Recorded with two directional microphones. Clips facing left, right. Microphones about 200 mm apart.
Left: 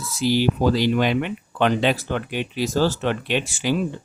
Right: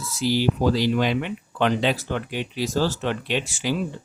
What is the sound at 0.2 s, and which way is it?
Speech, 60° left (ahead or behind).